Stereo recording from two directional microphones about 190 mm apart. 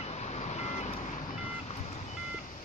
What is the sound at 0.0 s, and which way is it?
Vehicle, 35° left (ahead or behind).